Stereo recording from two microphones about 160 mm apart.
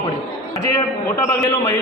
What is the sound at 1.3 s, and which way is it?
Speech, 15° left (ahead or behind).